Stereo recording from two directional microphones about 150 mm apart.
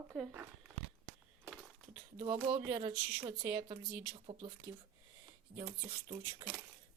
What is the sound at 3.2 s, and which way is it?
Speech, 30° right (ahead or behind).